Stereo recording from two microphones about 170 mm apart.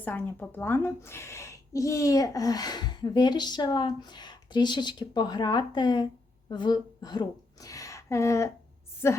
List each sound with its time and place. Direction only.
0.0 s a woman's voice: 10° left (ahead or behind)